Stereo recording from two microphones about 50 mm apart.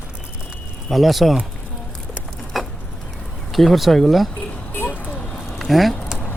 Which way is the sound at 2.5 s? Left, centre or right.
Centre.